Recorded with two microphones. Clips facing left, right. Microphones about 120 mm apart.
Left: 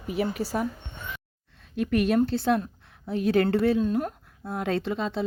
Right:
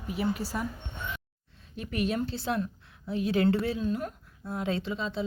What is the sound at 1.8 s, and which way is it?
Speech, 65° left (ahead or behind).